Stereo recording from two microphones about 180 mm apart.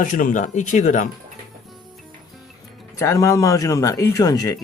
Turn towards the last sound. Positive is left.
turn(degrees=20)  # may be behind; listen again after turning